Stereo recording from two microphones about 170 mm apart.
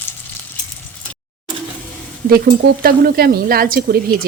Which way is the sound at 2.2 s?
60° right (ahead or behind).